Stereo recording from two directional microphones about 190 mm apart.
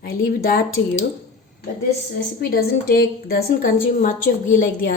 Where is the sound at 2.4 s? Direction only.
55° left (ahead or behind).